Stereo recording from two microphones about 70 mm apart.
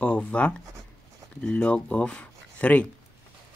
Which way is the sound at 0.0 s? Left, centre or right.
Centre.